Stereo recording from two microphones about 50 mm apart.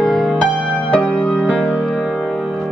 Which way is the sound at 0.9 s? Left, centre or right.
Left.